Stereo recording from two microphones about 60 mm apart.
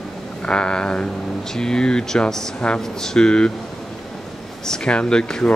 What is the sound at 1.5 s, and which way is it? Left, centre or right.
Speech, centre.